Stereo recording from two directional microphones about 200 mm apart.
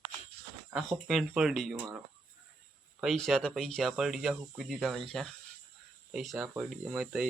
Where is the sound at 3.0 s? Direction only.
Centre (ahead or behind).